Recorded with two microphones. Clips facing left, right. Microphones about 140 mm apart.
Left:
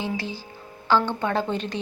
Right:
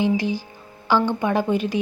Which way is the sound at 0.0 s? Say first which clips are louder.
Right 8 dB; 15° right (ahead or behind).